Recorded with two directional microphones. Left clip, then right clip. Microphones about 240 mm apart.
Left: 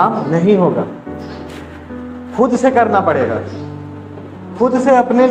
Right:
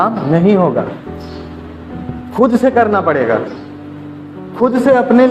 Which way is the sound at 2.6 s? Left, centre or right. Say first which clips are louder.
Left 2 dB; right.